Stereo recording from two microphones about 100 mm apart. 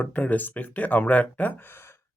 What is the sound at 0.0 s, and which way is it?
Speech, 15° left (ahead or behind).